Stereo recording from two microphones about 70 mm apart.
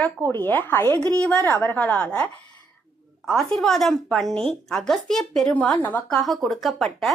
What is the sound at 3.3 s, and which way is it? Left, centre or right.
Speech, centre.